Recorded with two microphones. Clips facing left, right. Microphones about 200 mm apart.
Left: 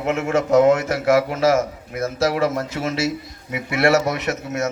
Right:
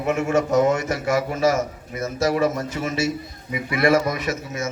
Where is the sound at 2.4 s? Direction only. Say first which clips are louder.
Left 1 dB; 90° left.